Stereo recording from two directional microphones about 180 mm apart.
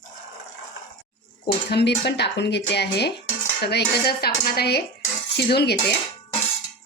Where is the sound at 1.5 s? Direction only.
65° left (ahead or behind).